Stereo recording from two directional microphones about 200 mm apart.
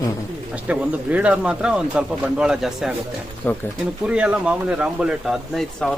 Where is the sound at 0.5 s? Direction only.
5° right (ahead or behind).